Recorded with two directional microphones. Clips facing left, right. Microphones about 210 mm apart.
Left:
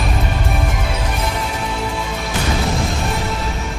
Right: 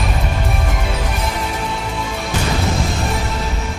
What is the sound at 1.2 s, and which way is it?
Music, centre (ahead or behind).